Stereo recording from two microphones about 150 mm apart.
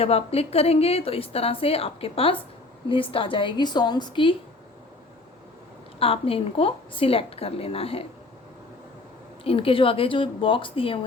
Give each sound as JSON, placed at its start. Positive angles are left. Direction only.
{"t": 0.0, "sound": "a woman's voice", "side_deg": 40}
{"t": 6.0, "sound": "a woman's voice", "side_deg": 40}
{"t": 9.4, "sound": "a woman's voice", "side_deg": 40}